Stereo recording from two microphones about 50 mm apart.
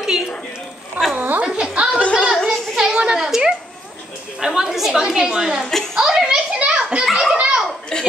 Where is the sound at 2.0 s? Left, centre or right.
Left.